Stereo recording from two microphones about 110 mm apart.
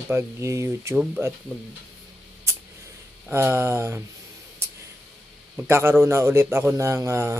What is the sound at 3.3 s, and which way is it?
Speech, 20° right (ahead or behind).